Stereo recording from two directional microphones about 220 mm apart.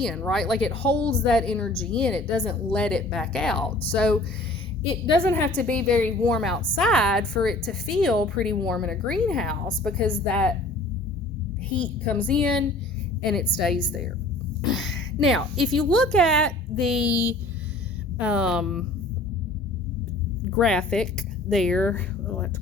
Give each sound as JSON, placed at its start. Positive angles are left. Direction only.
{"t": 0.0, "sound": "a woman's voice", "side_deg": 5}
{"t": 5.0, "sound": "a woman's voice", "side_deg": 20}
{"t": 5.5, "sound": "a woman's voice", "side_deg": 5}
{"t": 11.7, "sound": "a woman's voice", "side_deg": 5}
{"t": 14.7, "sound": "a woman's voice", "side_deg": 0}
{"t": 18.2, "sound": "a woman's voice", "side_deg": -5}
{"t": 20.6, "sound": "a woman's voice", "side_deg": 5}